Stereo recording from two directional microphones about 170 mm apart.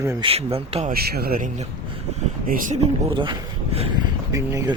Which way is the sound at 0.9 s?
65° right (ahead or behind).